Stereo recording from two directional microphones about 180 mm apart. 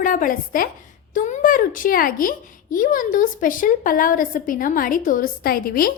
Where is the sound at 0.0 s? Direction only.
50° left (ahead or behind).